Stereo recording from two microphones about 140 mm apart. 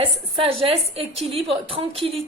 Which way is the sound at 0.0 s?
40° right (ahead or behind).